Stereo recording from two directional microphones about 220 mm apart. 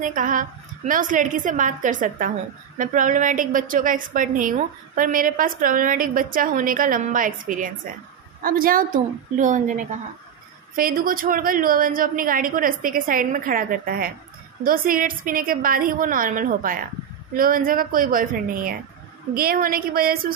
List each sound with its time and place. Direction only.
0.0 s a woman's voice: 35° right (ahead or behind)